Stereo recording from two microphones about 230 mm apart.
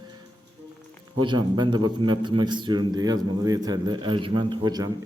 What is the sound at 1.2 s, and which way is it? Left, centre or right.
A man's voice, centre.